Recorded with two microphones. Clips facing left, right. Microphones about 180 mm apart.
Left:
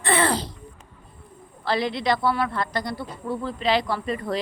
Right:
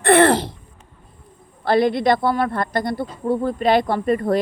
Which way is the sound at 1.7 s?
50° right (ahead or behind).